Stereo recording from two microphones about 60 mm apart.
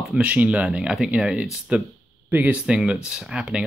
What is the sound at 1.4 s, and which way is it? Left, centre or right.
Speech, centre.